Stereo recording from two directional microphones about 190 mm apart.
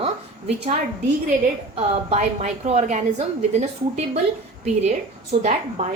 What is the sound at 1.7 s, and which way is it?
A woman's voice, 30° right (ahead or behind).